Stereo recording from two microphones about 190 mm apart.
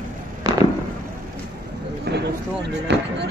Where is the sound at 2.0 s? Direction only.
60° right (ahead or behind).